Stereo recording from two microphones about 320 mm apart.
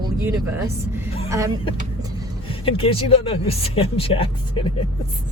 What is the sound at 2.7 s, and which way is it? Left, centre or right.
Speech, centre.